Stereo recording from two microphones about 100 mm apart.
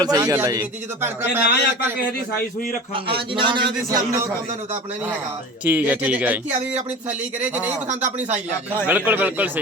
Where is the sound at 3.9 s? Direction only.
35° right (ahead or behind).